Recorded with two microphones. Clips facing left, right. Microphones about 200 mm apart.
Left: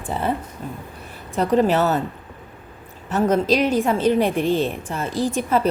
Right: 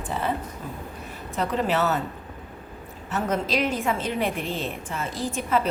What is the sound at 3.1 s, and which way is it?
A woman's voice, 35° left (ahead or behind).